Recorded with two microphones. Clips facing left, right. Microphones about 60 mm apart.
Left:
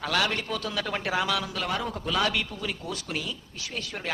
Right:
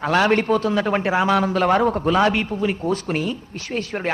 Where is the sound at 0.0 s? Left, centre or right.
Right.